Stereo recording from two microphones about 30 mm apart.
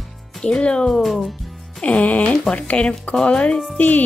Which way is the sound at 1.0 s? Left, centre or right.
Centre.